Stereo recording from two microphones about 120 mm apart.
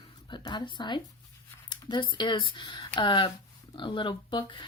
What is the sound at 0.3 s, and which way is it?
Speech, 40° left (ahead or behind).